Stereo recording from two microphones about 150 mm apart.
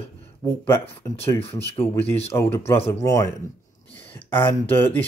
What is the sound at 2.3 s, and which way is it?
Speech, 15° left (ahead or behind).